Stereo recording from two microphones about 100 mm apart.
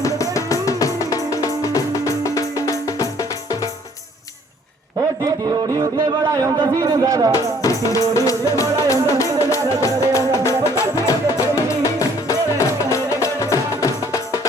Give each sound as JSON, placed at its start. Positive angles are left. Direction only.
{"t": 0.0, "sound": "music", "side_deg": 35}
{"t": 5.2, "sound": "speech", "side_deg": -35}
{"t": 7.3, "sound": "music", "side_deg": 35}